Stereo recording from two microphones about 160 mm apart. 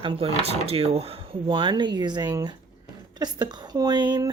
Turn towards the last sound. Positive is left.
turn(degrees=-30)  # may be behind; listen again after turning